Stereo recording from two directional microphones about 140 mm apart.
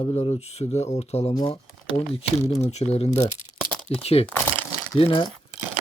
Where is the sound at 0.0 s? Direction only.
50° left (ahead or behind).